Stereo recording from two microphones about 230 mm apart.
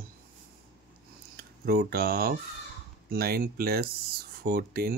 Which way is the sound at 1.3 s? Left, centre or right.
Right.